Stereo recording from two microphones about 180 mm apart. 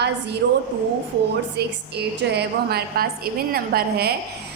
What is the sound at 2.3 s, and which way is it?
A woman's voice, 60° right (ahead or behind).